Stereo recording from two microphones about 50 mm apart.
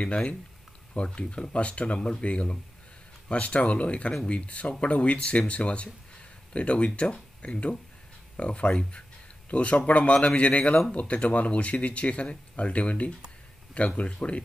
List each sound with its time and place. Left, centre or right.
0.0 s speech: left